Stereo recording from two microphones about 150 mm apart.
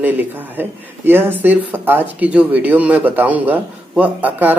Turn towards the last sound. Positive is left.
turn(degrees=-10)  # may be behind; listen again after turning